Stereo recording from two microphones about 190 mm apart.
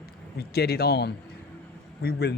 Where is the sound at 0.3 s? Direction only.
55° left (ahead or behind).